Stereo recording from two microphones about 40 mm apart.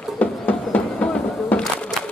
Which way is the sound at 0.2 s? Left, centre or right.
Left.